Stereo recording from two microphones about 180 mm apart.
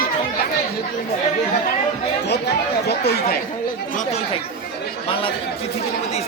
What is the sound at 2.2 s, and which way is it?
Speech, 65° left (ahead or behind).